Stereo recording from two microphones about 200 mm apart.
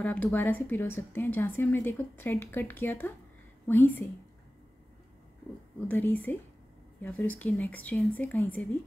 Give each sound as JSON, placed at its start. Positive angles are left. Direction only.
{"t": 0.0, "sound": "a woman's voice", "side_deg": 10}
{"t": 5.9, "sound": "a woman's voice", "side_deg": 10}